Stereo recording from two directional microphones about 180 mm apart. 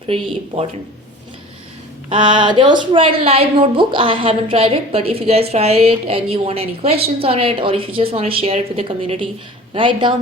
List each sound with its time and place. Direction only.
0.1 s a woman's voice: 35° right (ahead or behind)
2.0 s a woman's voice: 30° right (ahead or behind)